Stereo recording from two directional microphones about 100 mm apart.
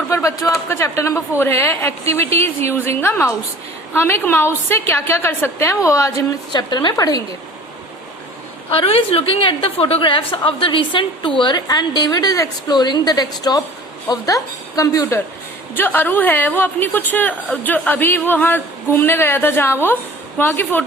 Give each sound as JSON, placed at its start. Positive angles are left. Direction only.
{"t": 0.1, "sound": "speech", "side_deg": 30}
{"t": 6.5, "sound": "a woman's voice", "side_deg": 45}
{"t": 8.7, "sound": "a woman's voice", "side_deg": 70}
{"t": 15.7, "sound": "speech", "side_deg": 20}